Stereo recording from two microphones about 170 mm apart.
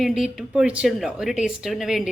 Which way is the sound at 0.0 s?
Centre (ahead or behind).